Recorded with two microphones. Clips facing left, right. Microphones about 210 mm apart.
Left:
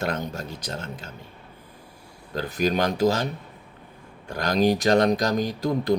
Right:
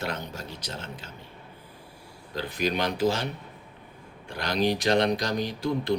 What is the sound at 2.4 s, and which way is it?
Speech, 45° left (ahead or behind).